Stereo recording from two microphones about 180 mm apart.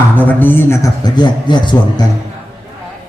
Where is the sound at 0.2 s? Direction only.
10° left (ahead or behind).